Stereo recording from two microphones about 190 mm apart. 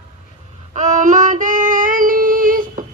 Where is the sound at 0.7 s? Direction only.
40° right (ahead or behind).